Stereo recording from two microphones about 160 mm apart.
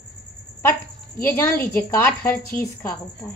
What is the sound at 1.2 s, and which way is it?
A woman's voice, 15° left (ahead or behind).